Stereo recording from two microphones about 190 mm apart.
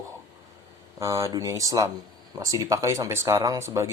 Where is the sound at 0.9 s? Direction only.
15° right (ahead or behind).